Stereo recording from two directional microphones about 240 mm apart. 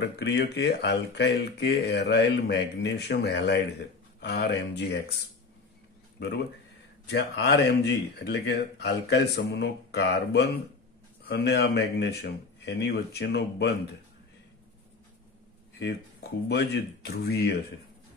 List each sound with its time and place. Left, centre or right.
0.0 s speech: left
6.1 s speech: left
15.8 s speech: left